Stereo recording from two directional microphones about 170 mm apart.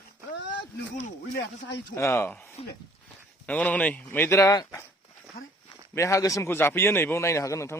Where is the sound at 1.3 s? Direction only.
90° left.